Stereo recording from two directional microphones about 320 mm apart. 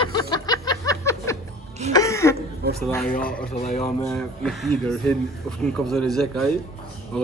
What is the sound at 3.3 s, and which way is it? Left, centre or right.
Speech, left.